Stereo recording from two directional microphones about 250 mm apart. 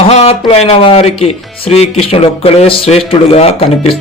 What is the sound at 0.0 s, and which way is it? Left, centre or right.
Speech, left.